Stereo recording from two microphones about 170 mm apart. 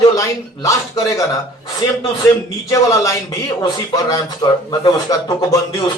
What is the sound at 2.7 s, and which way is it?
A man's voice, 20° left (ahead or behind).